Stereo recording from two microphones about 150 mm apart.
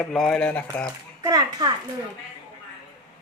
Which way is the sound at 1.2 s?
25° right (ahead or behind).